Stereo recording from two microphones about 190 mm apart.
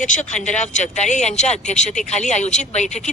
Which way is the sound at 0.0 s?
40° left (ahead or behind).